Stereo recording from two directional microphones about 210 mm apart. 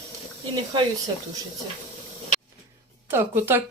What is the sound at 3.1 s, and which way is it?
Speech, 10° right (ahead or behind).